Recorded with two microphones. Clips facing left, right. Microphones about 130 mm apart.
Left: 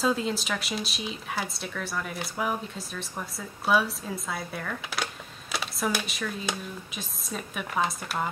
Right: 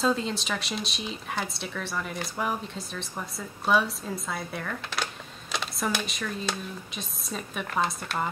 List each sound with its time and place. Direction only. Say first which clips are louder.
0.0 s speech: even; 5° left (ahead or behind)